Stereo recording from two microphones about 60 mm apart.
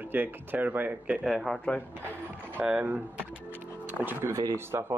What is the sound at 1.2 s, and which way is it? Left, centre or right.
Speech, centre.